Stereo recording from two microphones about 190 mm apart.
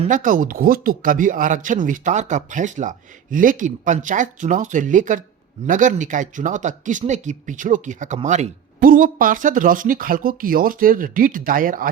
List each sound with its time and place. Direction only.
0.0 s speech: 45° right (ahead or behind)